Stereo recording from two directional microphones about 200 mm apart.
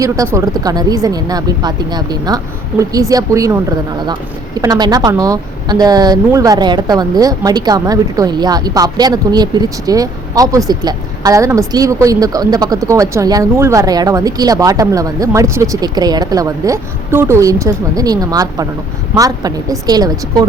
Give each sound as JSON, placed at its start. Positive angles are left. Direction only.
{"t": 0.0, "sound": "a woman's voice", "side_deg": -15}
{"t": 4.6, "sound": "a woman's voice", "side_deg": -20}